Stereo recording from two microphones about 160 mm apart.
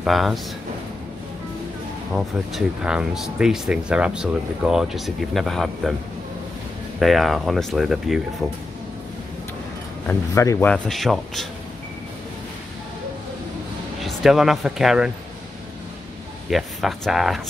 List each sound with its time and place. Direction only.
0.0 s speech: centre (ahead or behind)
2.1 s speech: 5° right (ahead or behind)
7.0 s speech: centre (ahead or behind)
10.0 s speech: 20° left (ahead or behind)
10.7 s speech: centre (ahead or behind)
14.0 s speech: centre (ahead or behind)
16.4 s speech: centre (ahead or behind)